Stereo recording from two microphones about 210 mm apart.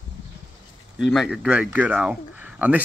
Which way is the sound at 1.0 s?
Centre (ahead or behind).